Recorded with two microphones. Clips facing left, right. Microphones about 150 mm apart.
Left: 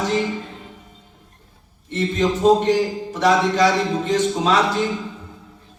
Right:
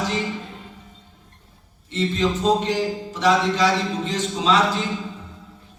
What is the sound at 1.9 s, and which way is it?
A man's voice, 50° left (ahead or behind).